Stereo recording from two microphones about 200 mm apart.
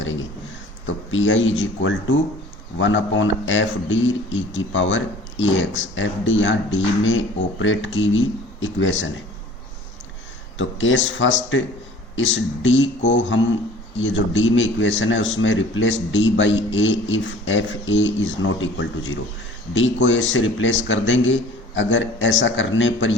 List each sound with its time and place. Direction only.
0.0 s a sound: 70° left (ahead or behind)
1.1 s a man's voice: 75° left (ahead or behind)
10.6 s a man's voice: 70° left (ahead or behind)